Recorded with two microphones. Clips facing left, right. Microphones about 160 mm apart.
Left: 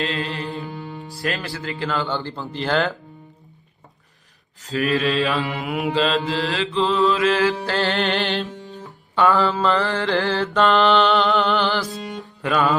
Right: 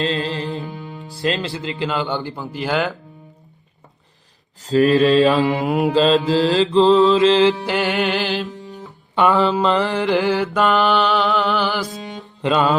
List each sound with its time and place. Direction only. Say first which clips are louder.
0.0 s music: right 4 dB; 30° right (ahead or behind)
1.1 s mantra: right 5 dB; 25° right (ahead or behind)
2.3 s speech: even; 5° right (ahead or behind)
4.6 s mantra: right 7 dB; 35° right (ahead or behind)
5.8 s mantra: right 5 dB; 35° right (ahead or behind)
7.6 s music: right 2 dB; 15° right (ahead or behind)
9.1 s mantra: right 2 dB; 20° right (ahead or behind)
10.6 s music: left 2 dB; centre (ahead or behind)
12.2 s music: right 3 dB; 20° right (ahead or behind)